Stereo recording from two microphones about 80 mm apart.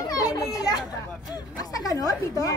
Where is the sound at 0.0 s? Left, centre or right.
Left.